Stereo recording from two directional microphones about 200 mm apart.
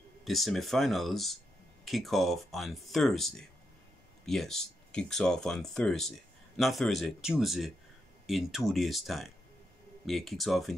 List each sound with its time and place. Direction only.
0.2 s speech: centre (ahead or behind)